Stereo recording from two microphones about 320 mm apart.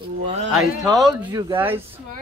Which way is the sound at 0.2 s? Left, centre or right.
Centre.